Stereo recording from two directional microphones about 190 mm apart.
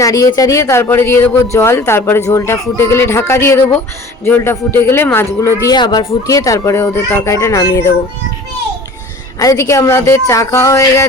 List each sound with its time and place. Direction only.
0.0 s speech: 20° left (ahead or behind)
9.4 s speech: 15° left (ahead or behind)